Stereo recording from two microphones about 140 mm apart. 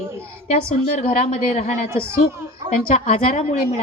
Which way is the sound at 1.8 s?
20° right (ahead or behind).